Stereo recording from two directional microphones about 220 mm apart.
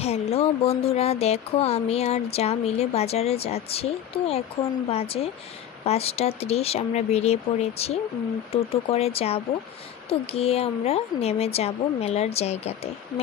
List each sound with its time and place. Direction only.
0.0 s speech: 30° left (ahead or behind)